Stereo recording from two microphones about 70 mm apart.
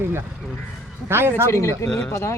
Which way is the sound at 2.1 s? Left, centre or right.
Left.